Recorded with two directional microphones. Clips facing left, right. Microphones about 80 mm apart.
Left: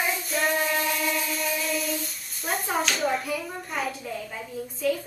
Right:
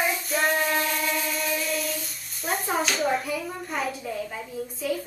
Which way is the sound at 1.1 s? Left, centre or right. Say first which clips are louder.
Right 1 dB; centre.